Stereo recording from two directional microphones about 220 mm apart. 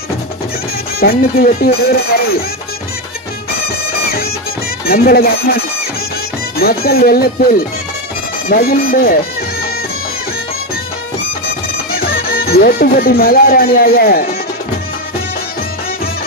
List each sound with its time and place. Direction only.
1.4 s speech: 40° left (ahead or behind)
4.8 s speech: 45° left (ahead or behind)
6.6 s speech: 45° left (ahead or behind)
11.9 s speech: 40° left (ahead or behind)